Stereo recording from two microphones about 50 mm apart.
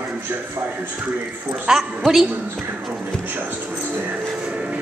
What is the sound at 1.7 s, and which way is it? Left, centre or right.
Speech, centre.